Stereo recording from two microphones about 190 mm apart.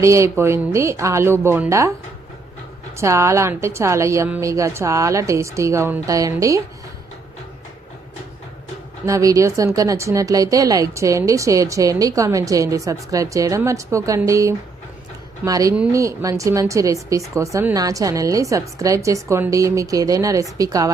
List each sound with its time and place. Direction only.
0.0 s speech: 15° right (ahead or behind)
3.0 s speech: 15° right (ahead or behind)
9.0 s speech: 15° right (ahead or behind)
15.7 s speech: 5° right (ahead or behind)
16.0 s speech: 15° right (ahead or behind)